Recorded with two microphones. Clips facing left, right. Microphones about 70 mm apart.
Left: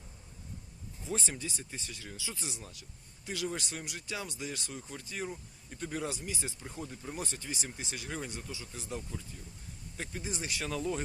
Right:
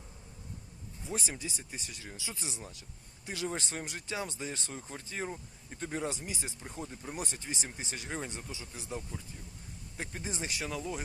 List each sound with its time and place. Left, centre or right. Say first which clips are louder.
1.0 s speech: left 1 dB; centre
10.1 s speech: even; right
10.6 s speech: left 5 dB; centre